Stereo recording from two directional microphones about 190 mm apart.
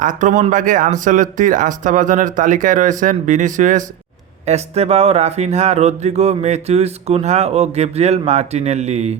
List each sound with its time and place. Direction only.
0.0 s speech: 40° right (ahead or behind)